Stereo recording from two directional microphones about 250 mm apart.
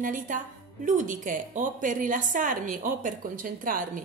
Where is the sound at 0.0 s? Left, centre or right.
Right.